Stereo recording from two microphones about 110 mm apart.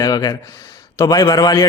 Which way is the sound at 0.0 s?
35° left (ahead or behind).